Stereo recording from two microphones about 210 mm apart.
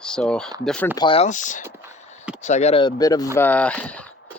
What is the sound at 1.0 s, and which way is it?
Speech, 25° left (ahead or behind).